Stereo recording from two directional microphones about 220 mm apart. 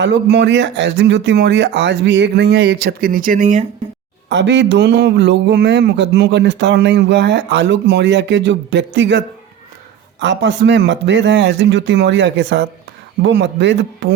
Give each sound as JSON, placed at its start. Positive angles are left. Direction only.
{"t": 0.0, "sound": "speech", "side_deg": -50}
{"t": 4.3, "sound": "speech", "side_deg": -55}